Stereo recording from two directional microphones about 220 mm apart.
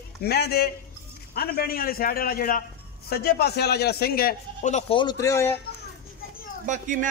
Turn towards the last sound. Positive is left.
turn(degrees=-35)  # may be behind; listen again after turning